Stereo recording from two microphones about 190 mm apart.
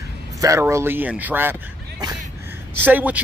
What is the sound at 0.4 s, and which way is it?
Speech, 15° right (ahead or behind).